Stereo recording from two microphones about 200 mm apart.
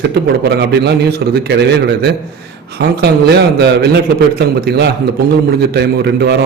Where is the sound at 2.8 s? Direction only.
55° right (ahead or behind).